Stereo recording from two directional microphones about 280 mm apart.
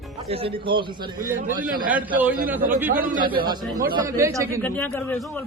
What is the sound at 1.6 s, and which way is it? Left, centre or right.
Speech, right.